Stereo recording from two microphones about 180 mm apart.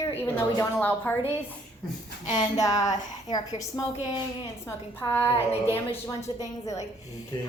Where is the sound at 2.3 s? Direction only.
20° left (ahead or behind).